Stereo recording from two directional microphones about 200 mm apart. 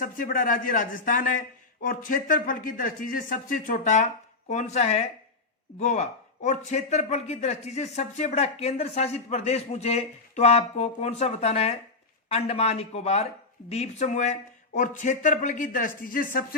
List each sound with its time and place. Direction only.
0.0 s a man's voice: 45° left (ahead or behind)